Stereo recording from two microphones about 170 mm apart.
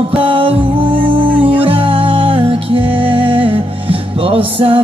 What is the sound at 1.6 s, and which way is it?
Music, 30° right (ahead or behind).